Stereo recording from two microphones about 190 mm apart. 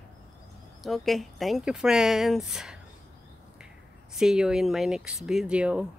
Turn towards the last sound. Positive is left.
turn(degrees=-5)  # may be behind; listen again after turning